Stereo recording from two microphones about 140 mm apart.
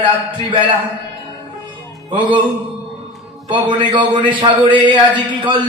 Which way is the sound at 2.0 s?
35° right (ahead or behind).